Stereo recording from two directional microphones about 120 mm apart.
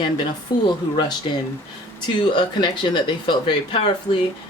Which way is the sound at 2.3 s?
40° left (ahead or behind).